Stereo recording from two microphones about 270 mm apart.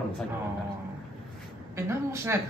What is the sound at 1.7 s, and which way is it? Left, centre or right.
Speech, centre.